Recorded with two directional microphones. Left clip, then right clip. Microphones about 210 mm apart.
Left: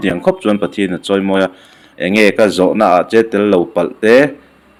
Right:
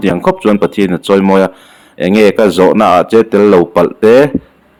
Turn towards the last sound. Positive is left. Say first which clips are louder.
# right 3 dB
turn(degrees=-35)  # may be behind; listen again after turning